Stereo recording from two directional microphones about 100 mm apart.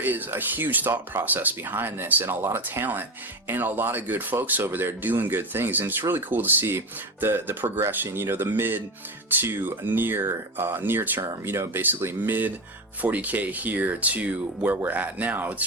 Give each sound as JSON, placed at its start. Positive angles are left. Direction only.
{"t": 0.0, "sound": "speech", "side_deg": -20}